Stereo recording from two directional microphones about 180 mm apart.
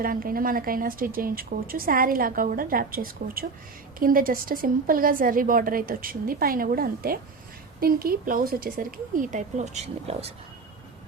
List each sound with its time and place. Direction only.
0.0 s a woman's voice: 50° right (ahead or behind)